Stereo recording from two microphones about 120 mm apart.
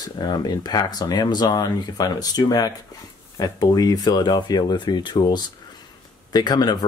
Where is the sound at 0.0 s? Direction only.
35° left (ahead or behind).